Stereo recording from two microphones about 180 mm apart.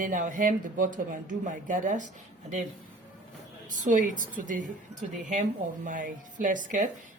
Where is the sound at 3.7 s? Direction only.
45° right (ahead or behind).